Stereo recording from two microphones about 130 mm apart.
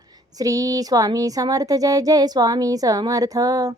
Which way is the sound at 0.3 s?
25° right (ahead or behind).